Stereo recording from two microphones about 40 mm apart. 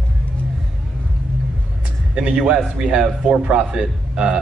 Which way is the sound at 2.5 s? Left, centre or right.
Right.